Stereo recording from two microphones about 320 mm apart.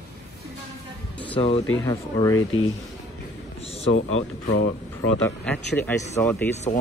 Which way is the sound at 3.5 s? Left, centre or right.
Centre.